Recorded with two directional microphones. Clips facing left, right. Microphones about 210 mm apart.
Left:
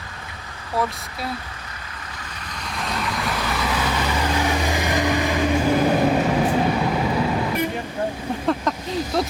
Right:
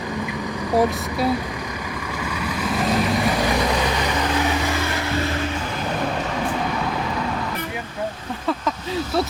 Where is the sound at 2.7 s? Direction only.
70° right (ahead or behind).